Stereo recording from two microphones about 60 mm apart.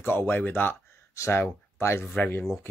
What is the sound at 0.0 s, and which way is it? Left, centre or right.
Speech, left.